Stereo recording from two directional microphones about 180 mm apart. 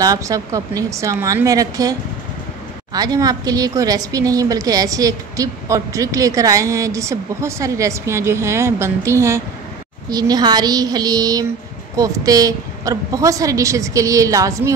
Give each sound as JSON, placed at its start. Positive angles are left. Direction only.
{"t": 0.0, "sound": "a woman's voice", "side_deg": -20}